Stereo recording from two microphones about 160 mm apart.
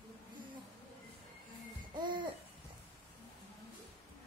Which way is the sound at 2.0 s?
30° right (ahead or behind).